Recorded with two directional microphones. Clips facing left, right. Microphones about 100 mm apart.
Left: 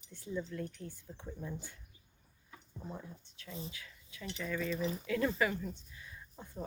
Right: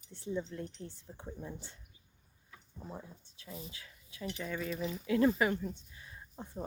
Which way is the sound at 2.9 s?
25° right (ahead or behind).